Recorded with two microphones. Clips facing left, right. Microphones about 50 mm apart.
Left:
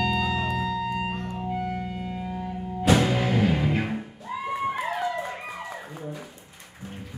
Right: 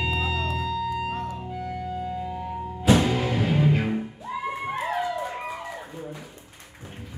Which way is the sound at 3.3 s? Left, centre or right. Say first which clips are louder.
Even; centre.